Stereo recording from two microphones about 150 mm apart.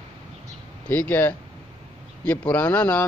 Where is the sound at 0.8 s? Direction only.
10° left (ahead or behind).